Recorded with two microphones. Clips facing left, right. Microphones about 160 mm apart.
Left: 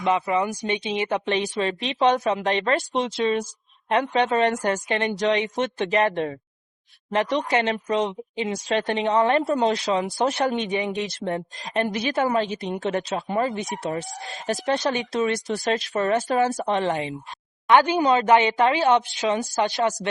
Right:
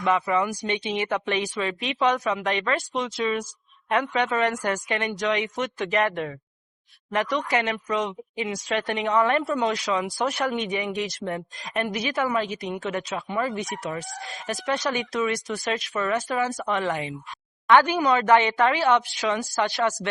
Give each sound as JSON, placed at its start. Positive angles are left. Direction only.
{"t": 0.0, "sound": "speech", "side_deg": 20}